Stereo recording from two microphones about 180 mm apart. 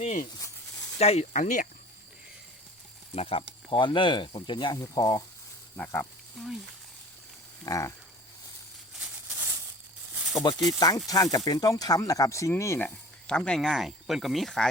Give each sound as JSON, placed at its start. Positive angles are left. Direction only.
{"t": 0.0, "sound": "speech", "side_deg": 45}
{"t": 3.2, "sound": "speech", "side_deg": 30}
{"t": 7.6, "sound": "speech", "side_deg": 15}
{"t": 10.3, "sound": "speech", "side_deg": 20}
{"t": 13.2, "sound": "speech", "side_deg": 5}